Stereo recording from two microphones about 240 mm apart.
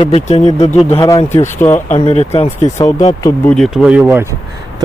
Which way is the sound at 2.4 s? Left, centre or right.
Centre.